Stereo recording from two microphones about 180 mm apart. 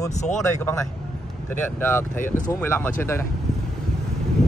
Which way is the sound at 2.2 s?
45° left (ahead or behind).